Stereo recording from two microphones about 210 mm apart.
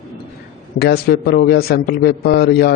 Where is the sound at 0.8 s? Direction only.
50° left (ahead or behind).